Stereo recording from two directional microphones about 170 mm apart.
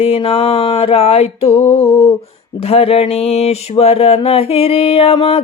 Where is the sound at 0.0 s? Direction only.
35° left (ahead or behind).